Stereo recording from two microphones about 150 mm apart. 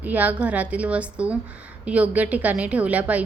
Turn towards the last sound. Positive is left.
turn(degrees=-10)  # may be behind; listen again after turning